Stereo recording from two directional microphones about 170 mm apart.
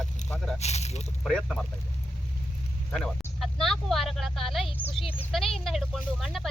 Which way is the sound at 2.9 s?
Centre (ahead or behind).